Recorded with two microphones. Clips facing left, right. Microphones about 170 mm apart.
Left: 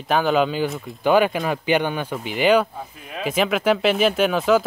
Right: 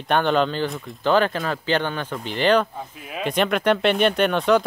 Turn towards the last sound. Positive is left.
turn(degrees=5)  # may be behind; listen again after turning